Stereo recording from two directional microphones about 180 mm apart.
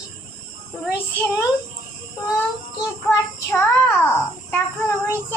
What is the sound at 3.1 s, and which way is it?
Child singing, 15° left (ahead or behind).